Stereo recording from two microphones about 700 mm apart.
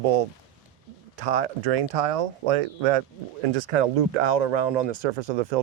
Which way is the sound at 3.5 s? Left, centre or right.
Right.